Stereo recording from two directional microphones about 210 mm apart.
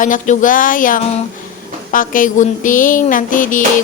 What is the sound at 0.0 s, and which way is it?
Speech, 40° left (ahead or behind).